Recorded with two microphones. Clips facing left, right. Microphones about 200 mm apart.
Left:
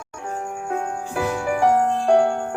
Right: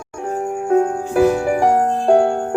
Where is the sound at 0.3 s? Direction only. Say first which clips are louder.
Right 9 dB; 35° right (ahead or behind).